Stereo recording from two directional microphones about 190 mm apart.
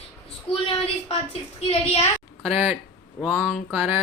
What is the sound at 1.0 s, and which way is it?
A woman's voice, 35° left (ahead or behind).